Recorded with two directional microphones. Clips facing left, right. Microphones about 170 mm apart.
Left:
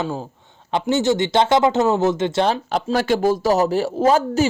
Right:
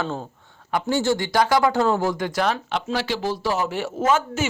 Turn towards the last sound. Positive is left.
turn(degrees=35)  # may be behind; listen again after turning